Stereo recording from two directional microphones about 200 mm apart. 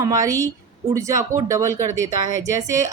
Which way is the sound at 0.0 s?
15° right (ahead or behind).